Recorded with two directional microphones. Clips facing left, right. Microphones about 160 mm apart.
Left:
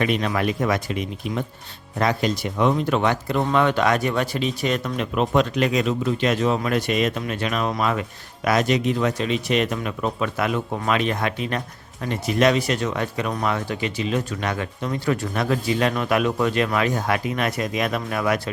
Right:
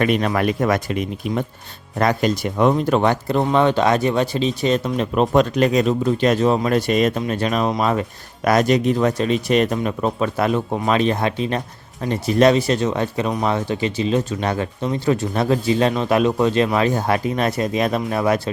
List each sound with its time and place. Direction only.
0.0 s speech: 50° right (ahead or behind); by 18.5 s 30° right (ahead or behind)